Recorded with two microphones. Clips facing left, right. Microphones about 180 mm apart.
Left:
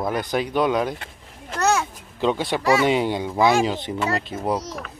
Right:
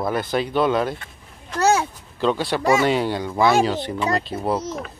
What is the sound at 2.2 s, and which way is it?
Speech, 15° left (ahead or behind).